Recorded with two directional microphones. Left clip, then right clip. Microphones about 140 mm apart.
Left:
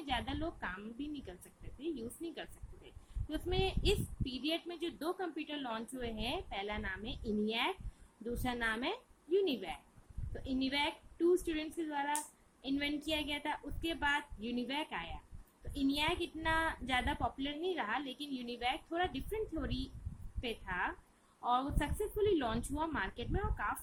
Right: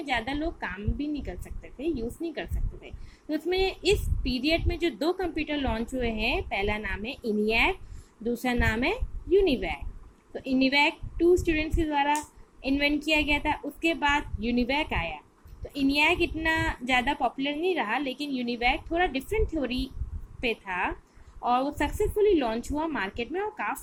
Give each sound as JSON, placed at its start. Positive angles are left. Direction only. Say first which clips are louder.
{"t": 0.0, "sound": "a woman's voice", "louder": "right 9 dB", "side_deg": -25}
{"t": 1.8, "sound": "a woman's voice", "louder": "right 11 dB", "side_deg": -25}
{"t": 4.2, "sound": "a woman's voice", "louder": "right 11 dB", "side_deg": 50}
{"t": 4.5, "sound": "a woman's voice", "louder": "right 12 dB", "side_deg": -25}
{"t": 5.3, "sound": "a woman's voice", "louder": "right 12 dB", "side_deg": 50}
{"t": 5.6, "sound": "a woman's voice", "louder": "right 12 dB", "side_deg": -30}